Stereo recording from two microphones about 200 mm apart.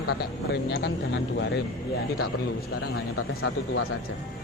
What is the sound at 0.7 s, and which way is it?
Speech, 55° left (ahead or behind).